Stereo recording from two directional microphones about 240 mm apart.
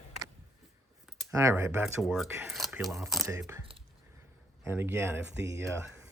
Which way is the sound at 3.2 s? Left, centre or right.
Centre.